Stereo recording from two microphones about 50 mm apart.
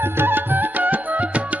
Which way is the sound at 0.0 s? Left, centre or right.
Right.